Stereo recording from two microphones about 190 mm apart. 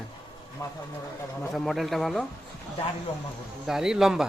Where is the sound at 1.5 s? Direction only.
Centre (ahead or behind).